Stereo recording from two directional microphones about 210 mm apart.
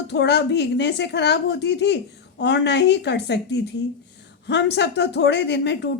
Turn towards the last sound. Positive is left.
turn(degrees=55)  # may be behind; listen again after turning